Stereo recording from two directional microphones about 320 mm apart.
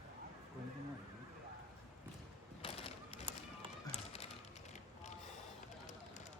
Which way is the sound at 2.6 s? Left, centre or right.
Centre.